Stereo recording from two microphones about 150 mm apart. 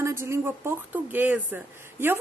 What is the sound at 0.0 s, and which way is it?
Speech, 15° right (ahead or behind).